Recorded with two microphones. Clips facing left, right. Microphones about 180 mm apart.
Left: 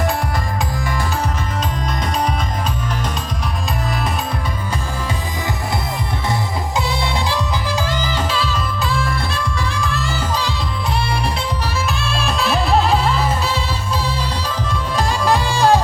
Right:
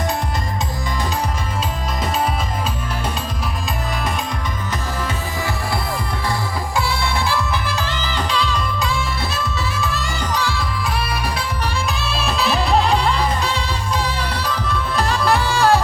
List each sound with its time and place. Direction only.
6.7 s music: 20° left (ahead or behind); by 10.2 s centre (ahead or behind)
10.3 s music: 15° left (ahead or behind)
12.0 s music: centre (ahead or behind)